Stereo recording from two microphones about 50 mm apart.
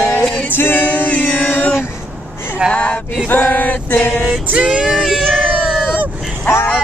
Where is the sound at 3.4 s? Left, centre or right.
Left.